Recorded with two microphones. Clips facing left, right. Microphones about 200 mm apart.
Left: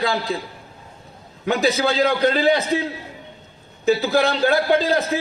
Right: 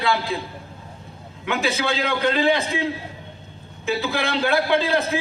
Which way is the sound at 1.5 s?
35° left (ahead or behind).